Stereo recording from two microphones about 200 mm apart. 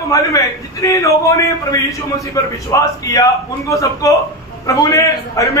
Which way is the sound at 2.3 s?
15° left (ahead or behind).